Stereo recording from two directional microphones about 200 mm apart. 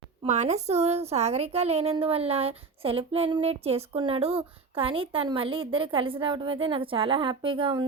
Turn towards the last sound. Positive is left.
turn(degrees=-25)  # may be behind; listen again after turning